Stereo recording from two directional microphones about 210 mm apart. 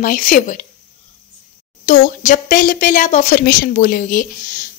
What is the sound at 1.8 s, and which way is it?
A woman's voice, 40° left (ahead or behind).